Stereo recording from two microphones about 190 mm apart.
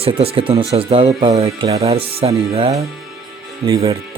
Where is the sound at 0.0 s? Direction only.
30° right (ahead or behind).